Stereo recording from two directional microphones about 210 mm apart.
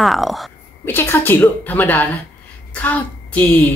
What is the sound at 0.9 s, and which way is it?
A child's voice, 10° left (ahead or behind).